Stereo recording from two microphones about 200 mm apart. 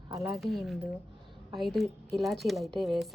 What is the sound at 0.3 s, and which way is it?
A woman's voice, centre (ahead or behind).